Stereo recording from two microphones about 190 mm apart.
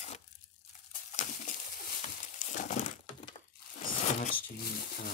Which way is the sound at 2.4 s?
45° left (ahead or behind).